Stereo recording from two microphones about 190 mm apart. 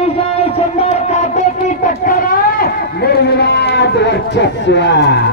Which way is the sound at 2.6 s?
55° left (ahead or behind).